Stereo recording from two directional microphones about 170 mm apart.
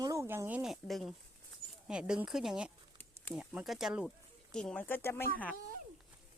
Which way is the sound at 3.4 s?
5° right (ahead or behind).